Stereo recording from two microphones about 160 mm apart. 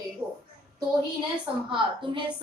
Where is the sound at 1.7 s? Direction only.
30° right (ahead or behind).